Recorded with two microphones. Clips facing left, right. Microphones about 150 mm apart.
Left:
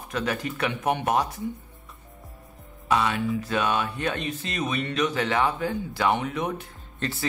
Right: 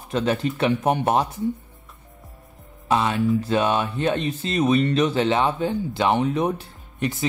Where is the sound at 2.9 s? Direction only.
30° right (ahead or behind).